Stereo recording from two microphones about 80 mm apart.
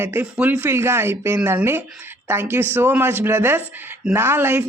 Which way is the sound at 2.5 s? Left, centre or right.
Right.